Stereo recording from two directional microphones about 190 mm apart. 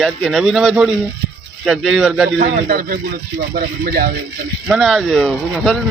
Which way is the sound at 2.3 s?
45° right (ahead or behind).